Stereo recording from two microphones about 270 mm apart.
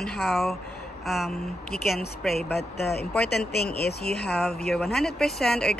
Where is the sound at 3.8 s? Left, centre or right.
Left.